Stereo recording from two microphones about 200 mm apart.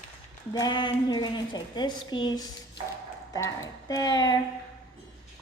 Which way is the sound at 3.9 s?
20° left (ahead or behind).